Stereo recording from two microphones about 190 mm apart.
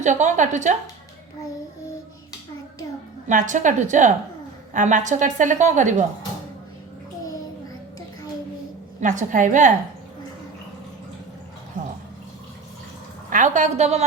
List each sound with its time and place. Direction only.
0.0 s a woman's voice: 40° right (ahead or behind)
3.2 s a woman's voice: 40° right (ahead or behind)
9.0 s a woman's voice: 40° right (ahead or behind)
13.3 s a woman's voice: 40° right (ahead or behind)